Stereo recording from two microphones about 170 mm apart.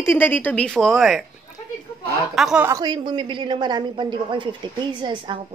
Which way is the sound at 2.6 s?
25° right (ahead or behind).